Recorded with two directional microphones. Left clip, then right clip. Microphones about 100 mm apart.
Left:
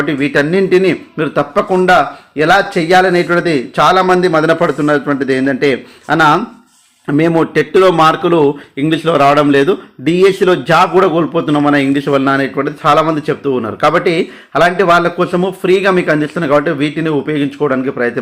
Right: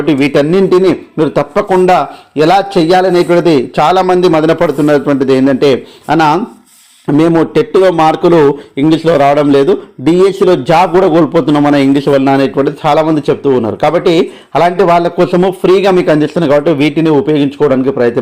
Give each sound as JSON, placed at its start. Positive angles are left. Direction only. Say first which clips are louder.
{"t": 0.0, "sound": "speech", "louder": "right 4 dB", "side_deg": -60}
{"t": 0.7, "sound": "a man's voice", "louder": "right 3 dB", "side_deg": -35}
{"t": 2.4, "sound": "a man's voice", "louder": "right 2 dB", "side_deg": -55}
{"t": 4.9, "sound": "a man's voice", "louder": "right 4 dB", "side_deg": -40}
{"t": 5.3, "sound": "a man's voice", "louder": "right 5 dB", "side_deg": -55}
{"t": 9.1, "sound": "a man's voice", "louder": "left 1 dB", "side_deg": -25}
{"t": 11.8, "sound": "a man's voice", "louder": "right 4 dB", "side_deg": -50}
{"t": 12.5, "sound": "a man's voice", "louder": "right 2 dB", "side_deg": -40}
{"t": 16.2, "sound": "a man's voice", "louder": "right 3 dB", "side_deg": -50}
{"t": 17.0, "sound": "speech", "louder": "right 6 dB", "side_deg": 15}
{"t": 17.3, "sound": "a man's voice", "louder": "right 5 dB", "side_deg": -50}